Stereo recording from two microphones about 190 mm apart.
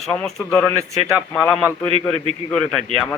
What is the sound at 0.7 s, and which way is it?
Speech, 15° right (ahead or behind).